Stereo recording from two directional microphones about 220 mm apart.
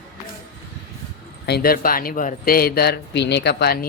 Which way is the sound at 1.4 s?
45° left (ahead or behind).